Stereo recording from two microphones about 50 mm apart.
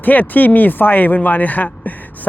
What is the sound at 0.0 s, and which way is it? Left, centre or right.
Speech, left.